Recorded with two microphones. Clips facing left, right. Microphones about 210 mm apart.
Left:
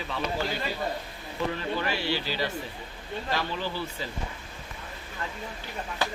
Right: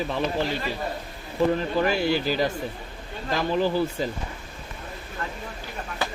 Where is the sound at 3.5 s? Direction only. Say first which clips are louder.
Right 10 dB; 45° right (ahead or behind).